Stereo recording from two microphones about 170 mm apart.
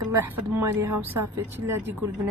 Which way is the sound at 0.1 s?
15° right (ahead or behind).